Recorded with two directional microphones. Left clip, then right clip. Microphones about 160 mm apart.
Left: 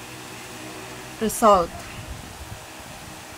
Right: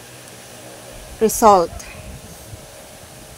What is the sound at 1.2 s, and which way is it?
Speech, 30° right (ahead or behind).